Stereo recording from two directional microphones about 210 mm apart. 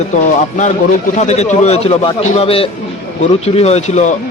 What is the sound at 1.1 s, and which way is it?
A man's voice, 35° left (ahead or behind).